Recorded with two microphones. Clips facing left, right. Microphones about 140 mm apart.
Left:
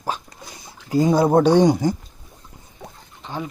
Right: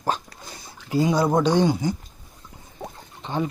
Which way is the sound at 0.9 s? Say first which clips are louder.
Left 4 dB; 45° left (ahead or behind).